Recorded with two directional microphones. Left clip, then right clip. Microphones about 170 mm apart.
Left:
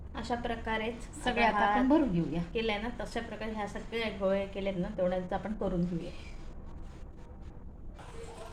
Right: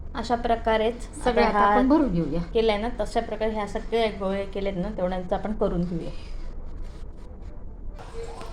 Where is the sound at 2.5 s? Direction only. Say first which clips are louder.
Right 11 dB; 30° right (ahead or behind).